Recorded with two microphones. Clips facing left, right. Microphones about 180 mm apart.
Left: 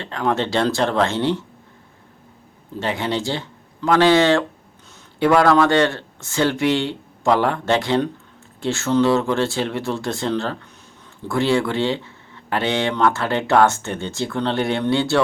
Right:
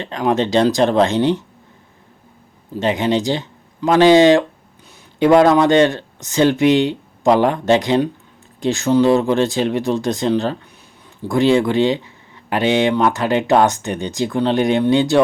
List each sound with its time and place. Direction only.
0.0 s speech: 15° right (ahead or behind)
2.7 s speech: 20° right (ahead or behind)